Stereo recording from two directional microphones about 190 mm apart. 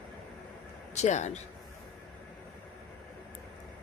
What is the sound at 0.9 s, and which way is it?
Speech, 35° left (ahead or behind).